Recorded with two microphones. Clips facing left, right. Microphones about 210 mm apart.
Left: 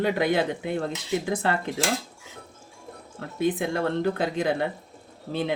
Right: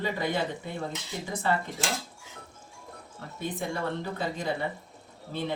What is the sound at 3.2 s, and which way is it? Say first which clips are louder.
Speech: left 9 dB; 90° left.